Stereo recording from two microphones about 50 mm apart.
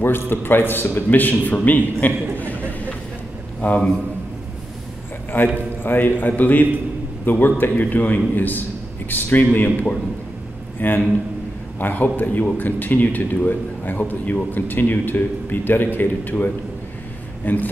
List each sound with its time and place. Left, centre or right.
0.0 s a man's voice: left
2.3 s a sound: left
3.6 s a man's voice: left
5.3 s a man's voice: left
17.5 s a man's voice: left